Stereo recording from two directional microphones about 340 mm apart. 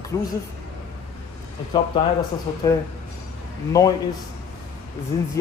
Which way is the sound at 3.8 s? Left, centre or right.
Centre.